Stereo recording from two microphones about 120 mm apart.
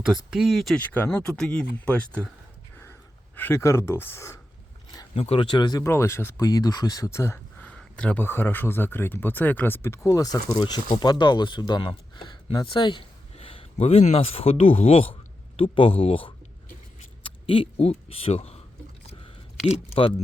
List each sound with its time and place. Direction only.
0.1 s speech: 5° right (ahead or behind)
0.8 s speech: 15° left (ahead or behind)
1.2 s speech: 5° left (ahead or behind)
3.3 s speech: 20° left (ahead or behind)
5.1 s speech: 55° left (ahead or behind); by 5.8 s 35° left (ahead or behind)
5.8 s speech: 20° left (ahead or behind)
7.7 s speech: 10° left (ahead or behind); by 18.6 s 60° left (ahead or behind)
19.6 s speech: 55° left (ahead or behind)